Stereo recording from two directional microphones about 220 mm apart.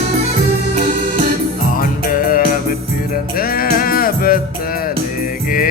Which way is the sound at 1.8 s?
40° left (ahead or behind).